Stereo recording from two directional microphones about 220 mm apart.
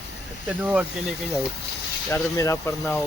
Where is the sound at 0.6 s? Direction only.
5° right (ahead or behind).